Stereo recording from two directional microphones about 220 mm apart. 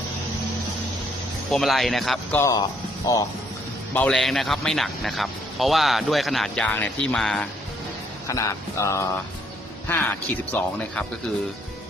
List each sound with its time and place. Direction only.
1.5 s speech: centre (ahead or behind)
2.4 s speech: 15° left (ahead or behind)
3.9 s speech: 5° left (ahead or behind)
8.3 s speech: 15° left (ahead or behind)